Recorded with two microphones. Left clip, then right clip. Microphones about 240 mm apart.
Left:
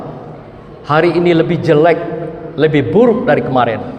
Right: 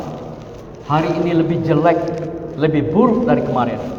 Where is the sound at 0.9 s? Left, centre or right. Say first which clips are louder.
Left 6 dB; left.